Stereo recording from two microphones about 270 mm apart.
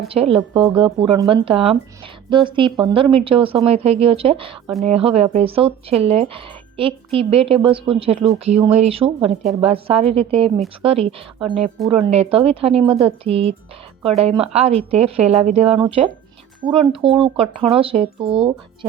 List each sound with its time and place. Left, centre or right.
0.1 s speech: right